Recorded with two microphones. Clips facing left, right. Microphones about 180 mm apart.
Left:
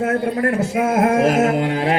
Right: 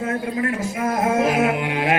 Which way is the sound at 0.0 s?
70° left (ahead or behind).